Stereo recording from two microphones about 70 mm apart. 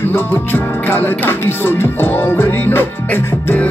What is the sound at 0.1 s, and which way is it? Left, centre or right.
Music, left.